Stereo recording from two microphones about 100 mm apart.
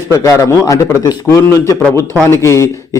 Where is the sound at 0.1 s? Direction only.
30° left (ahead or behind).